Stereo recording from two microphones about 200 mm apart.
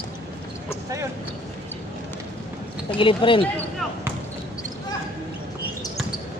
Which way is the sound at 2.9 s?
25° left (ahead or behind).